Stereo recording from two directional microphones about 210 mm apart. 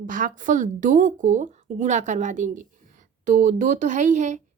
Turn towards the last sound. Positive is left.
turn(degrees=-35)  # may be behind; listen again after turning